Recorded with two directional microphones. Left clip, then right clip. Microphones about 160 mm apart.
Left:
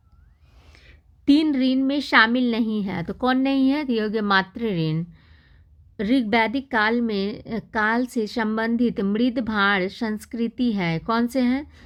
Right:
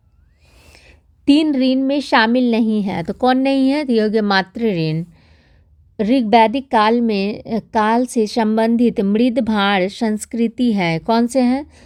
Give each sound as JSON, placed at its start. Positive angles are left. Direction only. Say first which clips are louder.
{"t": 0.7, "sound": "a woman's voice", "louder": "right 4 dB", "side_deg": -30}